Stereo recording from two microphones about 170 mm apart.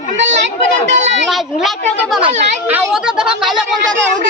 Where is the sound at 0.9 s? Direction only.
90° right.